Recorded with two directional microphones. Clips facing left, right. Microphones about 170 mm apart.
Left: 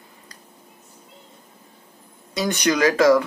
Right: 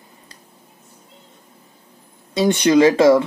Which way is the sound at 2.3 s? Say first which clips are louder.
Right 7 dB; 25° right (ahead or behind).